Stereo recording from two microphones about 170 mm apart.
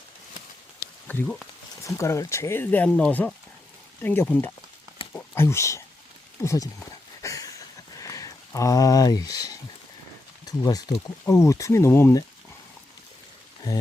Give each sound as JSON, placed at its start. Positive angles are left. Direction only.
{"t": 1.0, "sound": "speech", "side_deg": 5}
{"t": 1.8, "sound": "speech", "side_deg": 15}
{"t": 7.2, "sound": "a sound", "side_deg": 20}
{"t": 10.4, "sound": "speech", "side_deg": 20}